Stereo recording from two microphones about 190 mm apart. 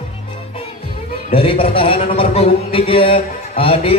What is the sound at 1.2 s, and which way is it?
A man's voice, 30° left (ahead or behind).